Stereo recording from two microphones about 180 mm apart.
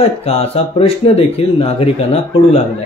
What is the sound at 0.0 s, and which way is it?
Speech, 35° left (ahead or behind).